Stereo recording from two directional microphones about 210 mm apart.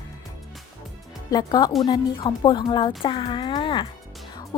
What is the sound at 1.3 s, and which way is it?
A woman's voice, 20° left (ahead or behind).